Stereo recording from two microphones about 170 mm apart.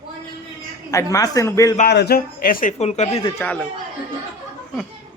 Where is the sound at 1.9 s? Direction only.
70° left (ahead or behind); by 3.2 s 40° left (ahead or behind).